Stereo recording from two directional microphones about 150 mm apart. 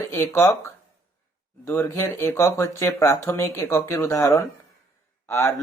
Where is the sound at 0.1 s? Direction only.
20° left (ahead or behind).